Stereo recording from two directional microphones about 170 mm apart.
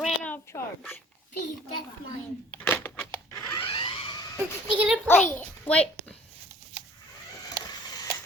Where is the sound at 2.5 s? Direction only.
10° left (ahead or behind); by 4.3 s 25° left (ahead or behind).